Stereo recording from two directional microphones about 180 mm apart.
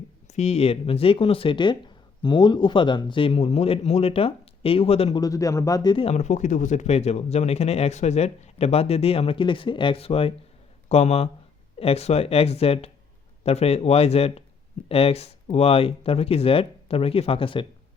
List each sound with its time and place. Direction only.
0.3 s speech: 35° left (ahead or behind)
5.2 s speech: 20° left (ahead or behind)